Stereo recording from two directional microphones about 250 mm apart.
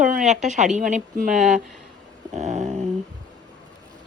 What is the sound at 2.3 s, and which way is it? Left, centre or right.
Speech, right.